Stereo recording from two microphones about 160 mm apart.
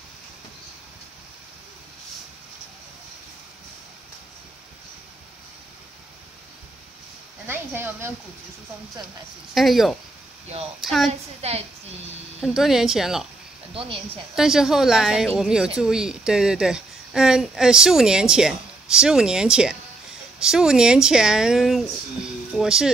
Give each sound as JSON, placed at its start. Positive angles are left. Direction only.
{"t": 7.4, "sound": "speech", "side_deg": -15}
{"t": 9.5, "sound": "speech", "side_deg": 0}
{"t": 11.4, "sound": "a woman's voice", "side_deg": -40}
{"t": 12.4, "sound": "speech", "side_deg": 0}
{"t": 14.3, "sound": "speech", "side_deg": -5}